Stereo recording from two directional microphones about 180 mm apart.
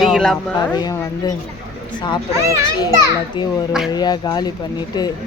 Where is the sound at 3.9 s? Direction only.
20° left (ahead or behind).